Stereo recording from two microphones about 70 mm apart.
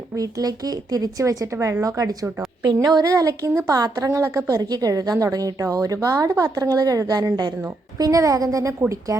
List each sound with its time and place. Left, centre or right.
0.2 s speech: right
1.5 s speech: right
2.8 s speech: right
3.7 s speech: right